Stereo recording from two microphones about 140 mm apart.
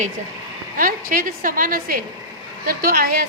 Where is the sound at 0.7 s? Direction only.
75° right (ahead or behind).